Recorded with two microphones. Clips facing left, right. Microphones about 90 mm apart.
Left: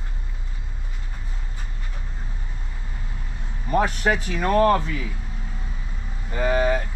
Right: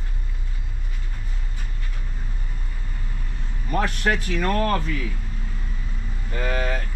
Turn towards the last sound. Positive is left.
turn(degrees=10)  # may be behind; listen again after turning